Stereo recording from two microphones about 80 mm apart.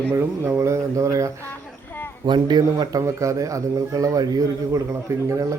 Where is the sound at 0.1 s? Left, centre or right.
Right.